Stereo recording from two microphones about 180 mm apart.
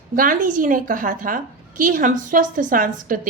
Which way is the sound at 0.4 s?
45° right (ahead or behind).